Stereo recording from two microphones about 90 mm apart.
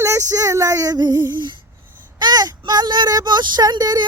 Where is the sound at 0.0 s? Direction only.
35° right (ahead or behind).